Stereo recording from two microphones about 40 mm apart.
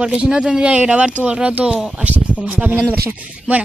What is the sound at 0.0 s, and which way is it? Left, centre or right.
Speech, right.